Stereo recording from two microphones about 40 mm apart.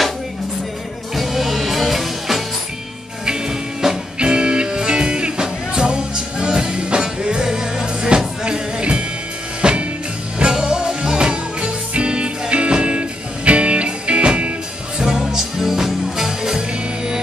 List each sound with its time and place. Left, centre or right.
1.1 s music: centre
3.3 s music: centre
4.2 s music: right
15.0 s music: centre